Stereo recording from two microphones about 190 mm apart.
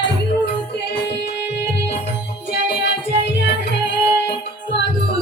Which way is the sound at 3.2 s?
65° left (ahead or behind).